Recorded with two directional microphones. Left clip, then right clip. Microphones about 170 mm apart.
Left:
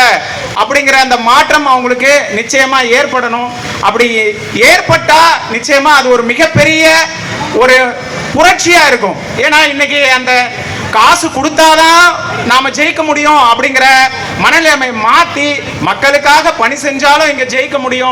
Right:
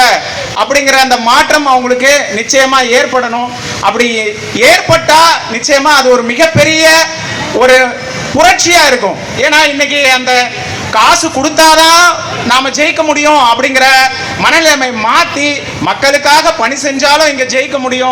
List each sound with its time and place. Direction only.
0.7 s a man's voice: 30° right (ahead or behind)
8.4 s a man's voice: 30° right (ahead or behind)